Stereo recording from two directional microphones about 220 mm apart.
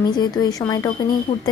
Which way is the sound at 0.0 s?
20° left (ahead or behind).